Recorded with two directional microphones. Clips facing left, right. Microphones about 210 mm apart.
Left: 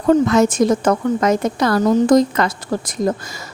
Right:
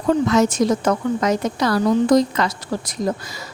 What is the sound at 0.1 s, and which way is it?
A woman's voice, 50° left (ahead or behind).